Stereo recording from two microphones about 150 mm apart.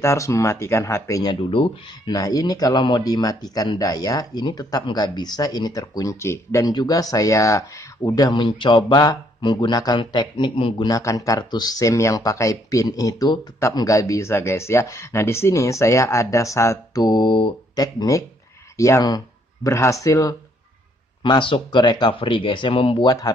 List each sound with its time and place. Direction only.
0.0 s speech: 20° left (ahead or behind)
1.3 s speech: 35° left (ahead or behind)
2.1 s speech: 25° left (ahead or behind)
10.9 s speech: 20° left (ahead or behind)
17.8 s speech: 20° left (ahead or behind)
21.2 s speech: 35° left (ahead or behind)